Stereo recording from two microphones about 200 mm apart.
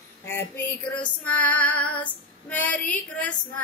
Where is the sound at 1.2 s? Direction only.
5° left (ahead or behind).